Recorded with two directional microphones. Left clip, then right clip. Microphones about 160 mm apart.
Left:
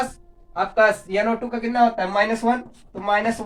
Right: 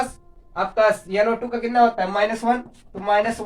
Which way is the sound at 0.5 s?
25° right (ahead or behind).